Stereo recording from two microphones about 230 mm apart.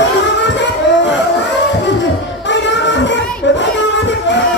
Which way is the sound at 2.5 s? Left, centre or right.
Left.